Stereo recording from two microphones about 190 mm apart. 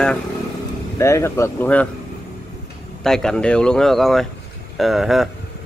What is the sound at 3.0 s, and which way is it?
Speech, 5° left (ahead or behind).